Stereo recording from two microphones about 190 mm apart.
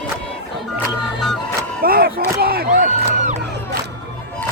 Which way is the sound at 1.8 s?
50° right (ahead or behind).